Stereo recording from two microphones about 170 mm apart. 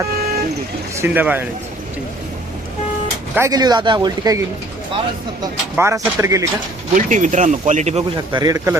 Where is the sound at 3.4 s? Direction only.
20° right (ahead or behind).